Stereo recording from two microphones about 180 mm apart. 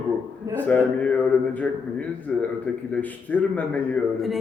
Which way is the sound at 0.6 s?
10° left (ahead or behind).